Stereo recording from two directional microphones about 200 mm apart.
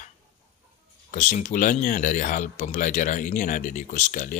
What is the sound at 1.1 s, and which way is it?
Speech, 40° left (ahead or behind).